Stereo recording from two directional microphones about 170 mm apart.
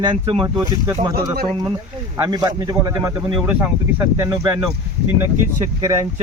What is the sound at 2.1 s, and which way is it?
Speech, 20° right (ahead or behind).